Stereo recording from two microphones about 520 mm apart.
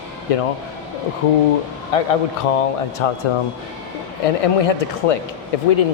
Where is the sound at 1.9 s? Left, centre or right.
Left.